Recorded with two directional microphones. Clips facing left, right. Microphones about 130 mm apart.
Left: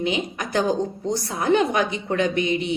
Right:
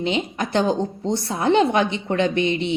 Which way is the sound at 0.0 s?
30° right (ahead or behind).